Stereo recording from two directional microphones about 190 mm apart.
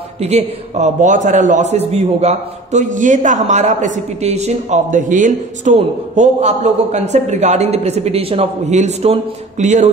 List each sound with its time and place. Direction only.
0.2 s a man's voice: 35° right (ahead or behind)